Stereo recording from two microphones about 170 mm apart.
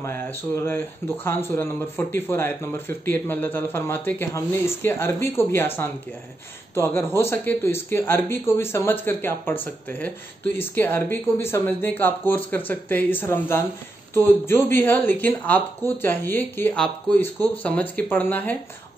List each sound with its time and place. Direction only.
0.0 s speech: 15° left (ahead or behind)
6.7 s speech: 15° left (ahead or behind)